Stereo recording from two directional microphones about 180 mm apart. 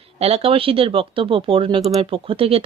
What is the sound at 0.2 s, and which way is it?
Speech, 35° right (ahead or behind).